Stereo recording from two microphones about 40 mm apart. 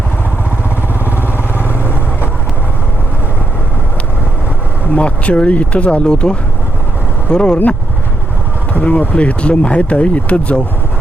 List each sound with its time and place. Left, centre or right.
1.1 s vehicle: right
4.9 s speech: left
7.3 s speech: left
8.8 s speech: left